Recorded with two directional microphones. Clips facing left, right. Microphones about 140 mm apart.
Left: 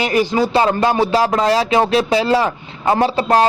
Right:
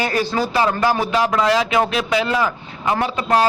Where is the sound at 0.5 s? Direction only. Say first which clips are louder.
Left 3 dB; 30° left (ahead or behind).